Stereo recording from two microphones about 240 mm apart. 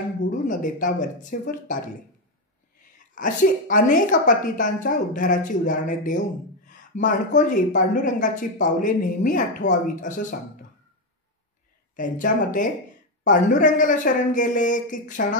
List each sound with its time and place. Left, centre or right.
0.2 s speech: left
3.2 s speech: left
11.9 s speech: left